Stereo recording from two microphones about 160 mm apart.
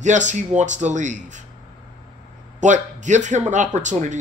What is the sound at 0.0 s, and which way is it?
Speech, 50° right (ahead or behind).